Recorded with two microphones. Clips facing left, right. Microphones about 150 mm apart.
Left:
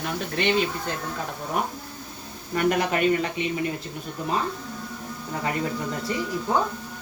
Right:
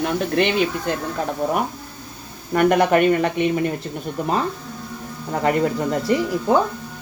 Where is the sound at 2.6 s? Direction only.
60° right (ahead or behind).